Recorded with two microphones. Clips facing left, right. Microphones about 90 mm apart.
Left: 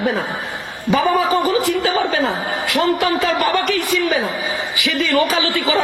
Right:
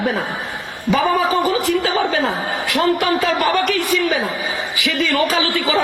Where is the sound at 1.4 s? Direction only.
20° left (ahead or behind).